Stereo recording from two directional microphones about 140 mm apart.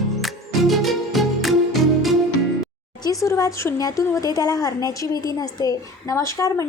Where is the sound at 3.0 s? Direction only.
25° left (ahead or behind).